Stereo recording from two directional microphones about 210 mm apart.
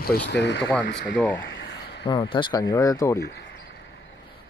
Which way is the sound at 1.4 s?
55° left (ahead or behind).